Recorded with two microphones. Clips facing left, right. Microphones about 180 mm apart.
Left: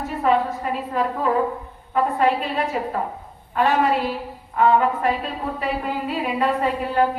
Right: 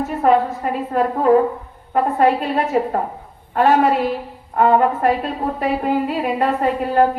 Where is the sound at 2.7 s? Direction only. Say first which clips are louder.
Right 6 dB; 45° right (ahead or behind).